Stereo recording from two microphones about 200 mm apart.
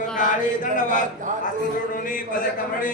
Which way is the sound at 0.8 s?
40° left (ahead or behind).